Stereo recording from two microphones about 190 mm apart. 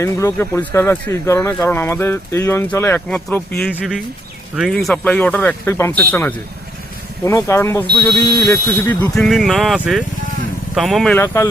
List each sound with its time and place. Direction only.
0.0 s speech: 15° left (ahead or behind)
9.1 s speech: centre (ahead or behind)